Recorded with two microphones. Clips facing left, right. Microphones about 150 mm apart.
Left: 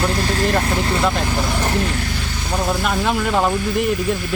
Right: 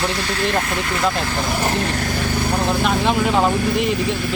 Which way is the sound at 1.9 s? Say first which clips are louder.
Right 3 dB; 45° right (ahead or behind).